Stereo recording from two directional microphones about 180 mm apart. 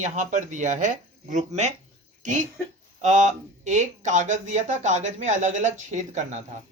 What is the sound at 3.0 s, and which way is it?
Speech, 40° right (ahead or behind).